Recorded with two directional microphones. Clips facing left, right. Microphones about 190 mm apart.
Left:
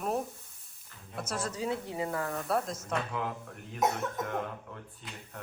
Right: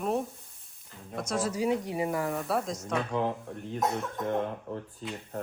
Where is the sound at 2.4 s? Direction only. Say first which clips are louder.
Right 1 dB; centre (ahead or behind).